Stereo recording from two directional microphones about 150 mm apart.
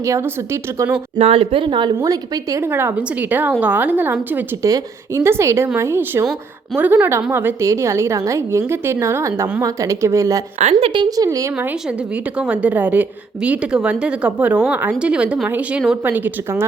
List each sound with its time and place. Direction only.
0.0 s a woman's voice: 20° right (ahead or behind)
1.2 s a woman's voice: 40° right (ahead or behind); by 10.4 s 20° right (ahead or behind)
10.6 s a woman's voice: 45° right (ahead or behind); by 11.5 s 20° right (ahead or behind)
11.5 s a woman's voice: 10° right (ahead or behind)